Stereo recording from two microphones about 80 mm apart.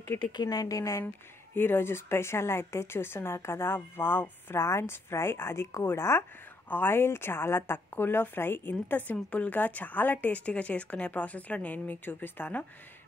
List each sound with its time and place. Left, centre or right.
0.3 s a woman's voice: left
1.0 s a woman's voice: left